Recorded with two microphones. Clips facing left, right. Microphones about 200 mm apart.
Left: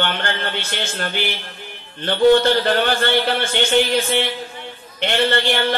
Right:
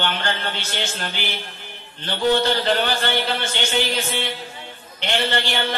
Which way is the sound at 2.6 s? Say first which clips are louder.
Left 3 dB; 55° left (ahead or behind).